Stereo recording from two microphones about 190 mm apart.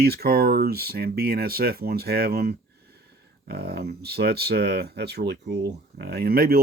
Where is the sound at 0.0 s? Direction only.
55° right (ahead or behind).